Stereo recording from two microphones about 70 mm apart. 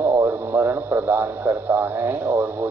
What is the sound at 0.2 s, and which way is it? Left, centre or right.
A man's voice, right.